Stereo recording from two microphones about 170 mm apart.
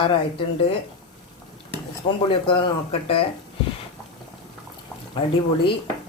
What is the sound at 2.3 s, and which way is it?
Speech, 30° left (ahead or behind).